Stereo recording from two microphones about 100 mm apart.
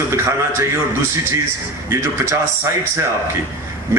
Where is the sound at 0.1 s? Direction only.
30° right (ahead or behind).